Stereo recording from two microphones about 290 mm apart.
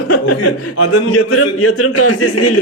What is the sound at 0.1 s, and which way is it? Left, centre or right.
A man's voice, left.